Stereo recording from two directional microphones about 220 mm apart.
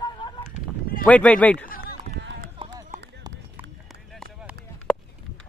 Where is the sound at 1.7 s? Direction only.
45° left (ahead or behind).